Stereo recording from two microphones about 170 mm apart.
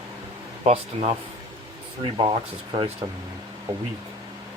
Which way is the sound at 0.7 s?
35° right (ahead or behind).